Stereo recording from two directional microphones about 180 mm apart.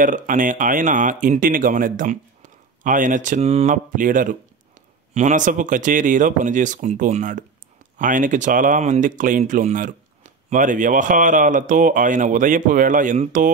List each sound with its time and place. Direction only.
0.0 s speech: 45° right (ahead or behind)